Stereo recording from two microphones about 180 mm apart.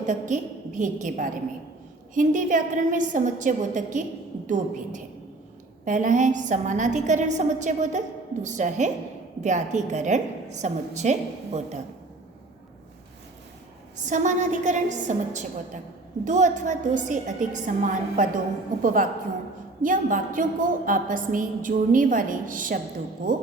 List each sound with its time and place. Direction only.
0.0 s a woman's voice: 45° right (ahead or behind)
13.9 s a woman's voice: 45° right (ahead or behind)
19.8 s a woman's voice: 50° right (ahead or behind)